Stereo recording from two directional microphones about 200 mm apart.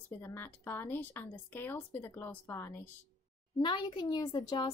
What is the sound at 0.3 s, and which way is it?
Speech, 10° left (ahead or behind).